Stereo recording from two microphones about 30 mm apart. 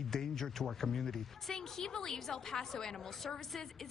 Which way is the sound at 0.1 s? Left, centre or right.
Centre.